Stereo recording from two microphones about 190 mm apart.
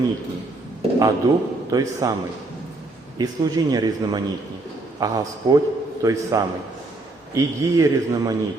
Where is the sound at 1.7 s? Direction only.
20° right (ahead or behind).